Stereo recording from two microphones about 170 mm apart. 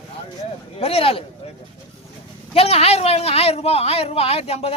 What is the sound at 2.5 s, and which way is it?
A woman's voice, 35° left (ahead or behind).